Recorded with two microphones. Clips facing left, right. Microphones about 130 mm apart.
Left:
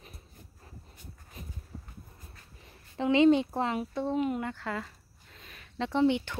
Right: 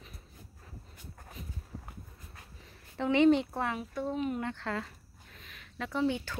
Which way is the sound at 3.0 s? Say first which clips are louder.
Left 2 dB; 20° left (ahead or behind).